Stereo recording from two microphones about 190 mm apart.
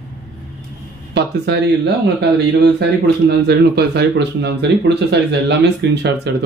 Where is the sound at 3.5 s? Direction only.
60° right (ahead or behind).